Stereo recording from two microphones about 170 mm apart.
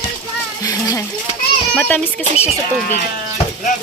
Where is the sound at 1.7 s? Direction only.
10° left (ahead or behind).